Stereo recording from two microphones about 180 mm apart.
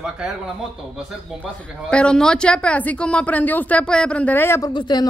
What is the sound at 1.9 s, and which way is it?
Speech, 5° left (ahead or behind).